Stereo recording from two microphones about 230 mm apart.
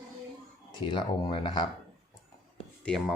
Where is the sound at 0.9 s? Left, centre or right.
Left.